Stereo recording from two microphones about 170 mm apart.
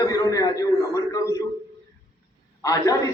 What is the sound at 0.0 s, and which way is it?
A man's voice, 20° left (ahead or behind).